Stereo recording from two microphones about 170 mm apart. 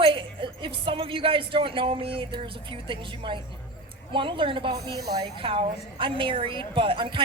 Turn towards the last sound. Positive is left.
turn(degrees=-30)  # may be behind; listen again after turning